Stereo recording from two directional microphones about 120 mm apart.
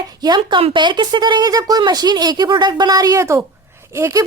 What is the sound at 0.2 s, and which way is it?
A woman's voice, 40° right (ahead or behind).